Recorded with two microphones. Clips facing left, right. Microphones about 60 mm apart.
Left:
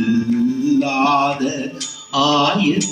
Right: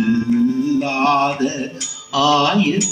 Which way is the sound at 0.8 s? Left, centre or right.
Centre.